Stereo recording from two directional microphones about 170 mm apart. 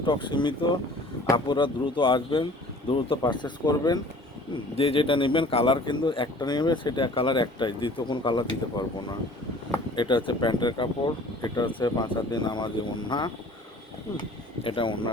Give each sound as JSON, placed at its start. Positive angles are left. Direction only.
{"t": 0.0, "sound": "speech", "side_deg": 30}